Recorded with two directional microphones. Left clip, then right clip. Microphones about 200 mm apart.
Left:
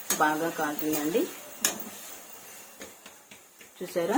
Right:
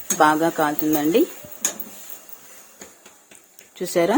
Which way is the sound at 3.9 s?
45° right (ahead or behind).